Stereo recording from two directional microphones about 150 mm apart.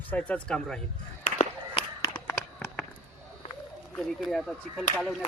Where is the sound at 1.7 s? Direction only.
30° left (ahead or behind).